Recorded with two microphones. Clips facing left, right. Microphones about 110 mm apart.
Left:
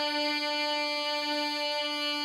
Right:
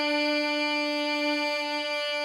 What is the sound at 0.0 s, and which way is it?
Music, 45° right (ahead or behind).